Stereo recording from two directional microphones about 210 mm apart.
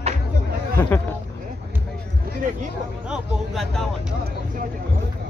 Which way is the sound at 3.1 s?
Centre (ahead or behind).